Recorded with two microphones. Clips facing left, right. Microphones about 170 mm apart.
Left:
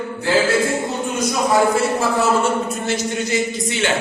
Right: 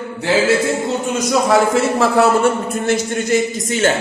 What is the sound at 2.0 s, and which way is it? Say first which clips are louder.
Speech: right 5 dB; 60° right (ahead or behind).